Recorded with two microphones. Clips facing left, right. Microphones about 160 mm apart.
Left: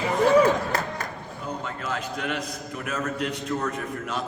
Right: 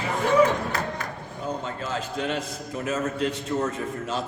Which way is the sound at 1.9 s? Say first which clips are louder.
Right 1 dB; 30° right (ahead or behind).